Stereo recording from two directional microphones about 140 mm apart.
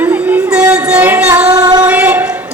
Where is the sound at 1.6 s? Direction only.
25° right (ahead or behind).